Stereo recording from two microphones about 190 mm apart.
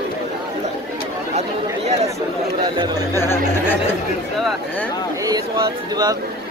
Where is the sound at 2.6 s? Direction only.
20° right (ahead or behind).